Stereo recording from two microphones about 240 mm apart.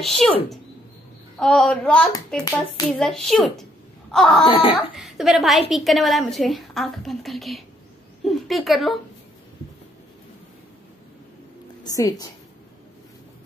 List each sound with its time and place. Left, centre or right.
0.0 s a woman's voice: centre
2.4 s a child's voice: centre
3.0 s a woman's voice: centre
4.5 s speech: left
4.9 s a woman's voice: centre
11.8 s a woman's voice: centre